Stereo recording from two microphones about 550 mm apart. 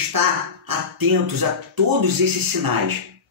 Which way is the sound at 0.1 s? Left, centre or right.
Right.